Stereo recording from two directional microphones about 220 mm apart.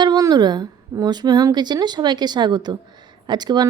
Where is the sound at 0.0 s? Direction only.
20° right (ahead or behind).